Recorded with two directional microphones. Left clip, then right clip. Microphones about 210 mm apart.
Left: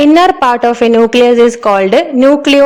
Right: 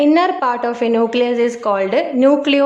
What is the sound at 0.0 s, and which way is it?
A woman's voice, 40° left (ahead or behind).